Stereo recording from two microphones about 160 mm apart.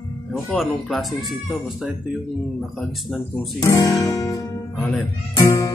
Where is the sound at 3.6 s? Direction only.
20° left (ahead or behind).